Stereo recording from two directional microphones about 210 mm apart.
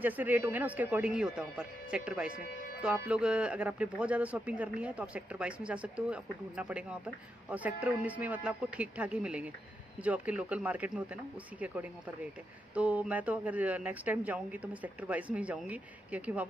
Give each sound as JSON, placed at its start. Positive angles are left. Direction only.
{"t": 0.0, "sound": "speech", "side_deg": -10}